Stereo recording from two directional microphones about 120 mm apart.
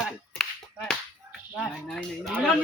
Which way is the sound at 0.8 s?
10° left (ahead or behind).